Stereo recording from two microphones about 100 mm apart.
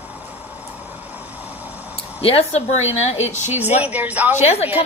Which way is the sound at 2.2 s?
80° left.